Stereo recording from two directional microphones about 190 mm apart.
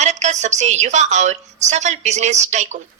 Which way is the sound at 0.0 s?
35° right (ahead or behind).